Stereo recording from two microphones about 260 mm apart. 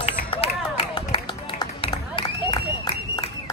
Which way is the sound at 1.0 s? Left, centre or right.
Centre.